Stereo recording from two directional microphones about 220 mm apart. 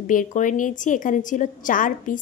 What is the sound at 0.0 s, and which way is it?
A woman's voice, 35° left (ahead or behind).